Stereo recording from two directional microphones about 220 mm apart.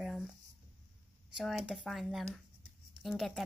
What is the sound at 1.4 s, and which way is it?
A child's voice, centre (ahead or behind).